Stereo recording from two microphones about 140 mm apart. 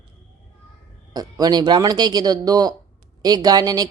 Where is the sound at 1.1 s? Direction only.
30° right (ahead or behind).